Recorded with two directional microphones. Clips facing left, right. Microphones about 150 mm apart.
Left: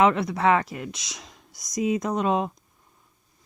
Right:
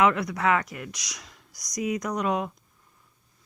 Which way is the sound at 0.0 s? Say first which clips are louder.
Left 2 dB; 25° left (ahead or behind).